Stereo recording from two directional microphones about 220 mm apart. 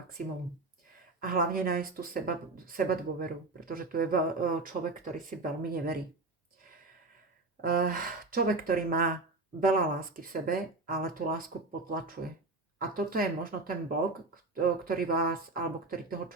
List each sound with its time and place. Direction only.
1.2 s speech: 40° right (ahead or behind)
7.6 s speech: 40° right (ahead or behind)